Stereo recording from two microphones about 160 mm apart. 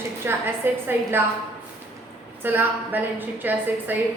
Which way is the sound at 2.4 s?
10° right (ahead or behind).